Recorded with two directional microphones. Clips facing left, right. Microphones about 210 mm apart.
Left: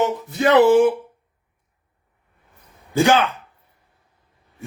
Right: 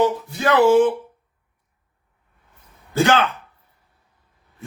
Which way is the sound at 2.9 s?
15° left (ahead or behind).